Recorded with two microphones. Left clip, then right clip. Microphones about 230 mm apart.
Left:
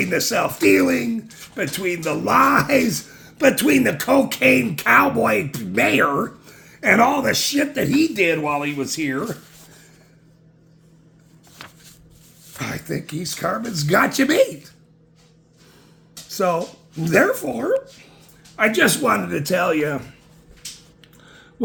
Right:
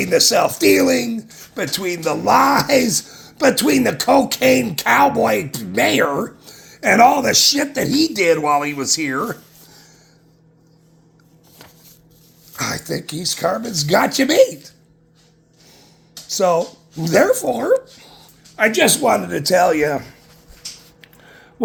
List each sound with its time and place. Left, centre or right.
0.0 s speech: centre
12.5 s speech: centre
16.3 s speech: centre
19.4 s a man's voice: right